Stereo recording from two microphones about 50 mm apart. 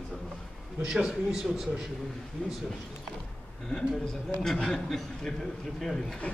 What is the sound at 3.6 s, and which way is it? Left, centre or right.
A man's voice, centre.